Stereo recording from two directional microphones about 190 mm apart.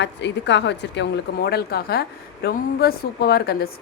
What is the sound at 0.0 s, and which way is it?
A woman's voice, 65° left (ahead or behind).